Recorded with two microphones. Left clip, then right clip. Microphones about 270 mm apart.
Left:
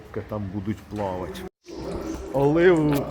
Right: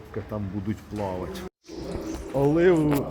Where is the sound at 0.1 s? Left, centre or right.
Centre.